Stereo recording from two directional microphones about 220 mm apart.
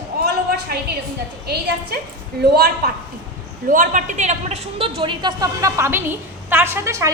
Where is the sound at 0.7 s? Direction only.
45° right (ahead or behind).